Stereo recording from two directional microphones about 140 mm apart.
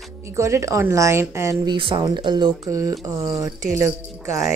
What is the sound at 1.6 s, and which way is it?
Speech, 35° right (ahead or behind).